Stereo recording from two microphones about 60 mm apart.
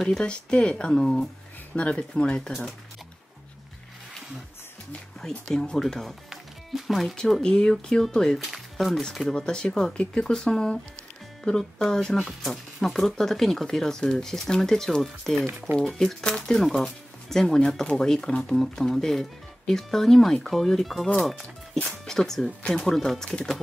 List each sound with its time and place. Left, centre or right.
0.2 s speech: centre
1.8 s speech: centre
5.5 s speech: centre
7.4 s speech: centre
9.3 s speech: centre